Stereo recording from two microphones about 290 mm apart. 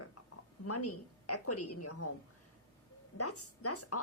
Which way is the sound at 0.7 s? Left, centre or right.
Left.